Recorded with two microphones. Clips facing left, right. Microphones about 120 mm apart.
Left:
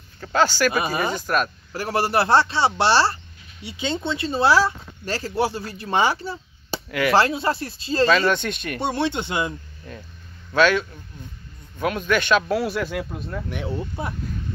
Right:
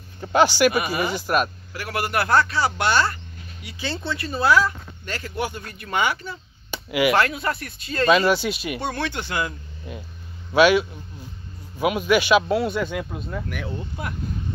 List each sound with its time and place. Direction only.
0.2 s speech: 15° right (ahead or behind)
0.7 s speech: 35° left (ahead or behind)
1.1 s speech: 10° right (ahead or behind)
1.7 s speech: 35° left (ahead or behind)
3.6 s speech: 20° left (ahead or behind)
8.1 s speech: 10° right (ahead or behind)
8.8 s speech: 25° left (ahead or behind)
9.9 s speech: 10° right (ahead or behind)
13.7 s speech: 30° left (ahead or behind)